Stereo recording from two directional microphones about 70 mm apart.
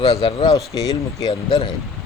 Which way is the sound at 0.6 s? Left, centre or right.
Left.